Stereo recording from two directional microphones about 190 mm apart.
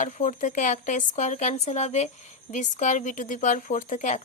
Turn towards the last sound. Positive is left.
turn(degrees=40)  # may be behind; listen again after turning